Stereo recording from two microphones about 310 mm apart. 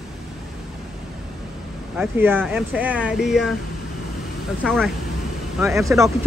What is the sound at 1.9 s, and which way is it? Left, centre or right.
Speech, centre.